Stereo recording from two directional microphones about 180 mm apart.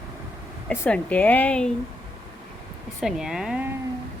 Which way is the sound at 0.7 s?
5° left (ahead or behind).